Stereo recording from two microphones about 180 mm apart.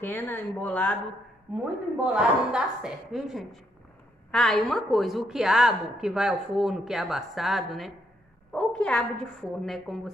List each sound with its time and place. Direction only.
0.0 s speech: 10° left (ahead or behind)
2.0 s a woman's voice: 5° right (ahead or behind)